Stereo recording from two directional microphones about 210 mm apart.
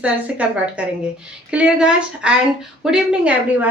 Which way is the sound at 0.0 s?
5° right (ahead or behind).